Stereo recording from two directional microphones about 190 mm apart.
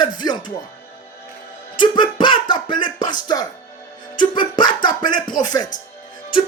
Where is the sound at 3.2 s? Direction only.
20° left (ahead or behind).